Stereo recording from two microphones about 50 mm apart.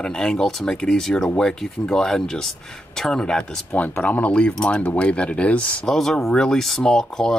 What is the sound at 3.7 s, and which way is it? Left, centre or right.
Speech, left.